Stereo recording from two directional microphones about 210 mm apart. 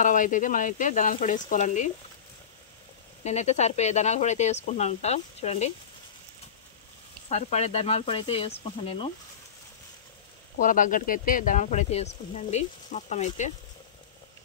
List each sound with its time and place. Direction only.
0.0 s speech: 40° left (ahead or behind)
3.3 s speech: 30° left (ahead or behind)
7.2 s speech: 35° left (ahead or behind)
10.6 s speech: 40° left (ahead or behind)